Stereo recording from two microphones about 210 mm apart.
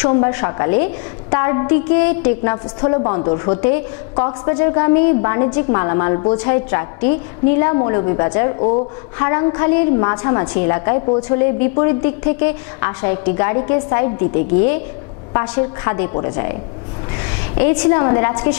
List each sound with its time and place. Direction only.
0.0 s a woman's voice: 25° left (ahead or behind)
15.3 s a woman's voice: 20° left (ahead or behind)
17.6 s a woman's voice: 15° left (ahead or behind)